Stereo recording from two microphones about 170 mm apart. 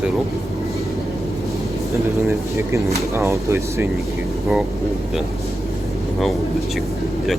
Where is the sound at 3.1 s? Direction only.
15° right (ahead or behind).